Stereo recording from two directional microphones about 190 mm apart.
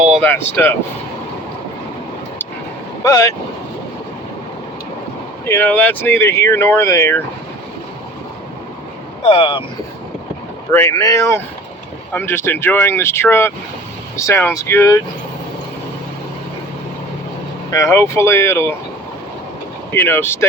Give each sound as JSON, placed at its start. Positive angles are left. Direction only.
{"t": 0.0, "sound": "a sound", "side_deg": 0}
{"t": 0.3, "sound": "speech", "side_deg": 10}
{"t": 3.0, "sound": "speech", "side_deg": 15}
{"t": 5.5, "sound": "speech", "side_deg": 10}
{"t": 9.2, "sound": "speech", "side_deg": 30}
{"t": 10.7, "sound": "speech", "side_deg": 15}
{"t": 17.7, "sound": "speech", "side_deg": 15}
{"t": 19.9, "sound": "speech", "side_deg": 10}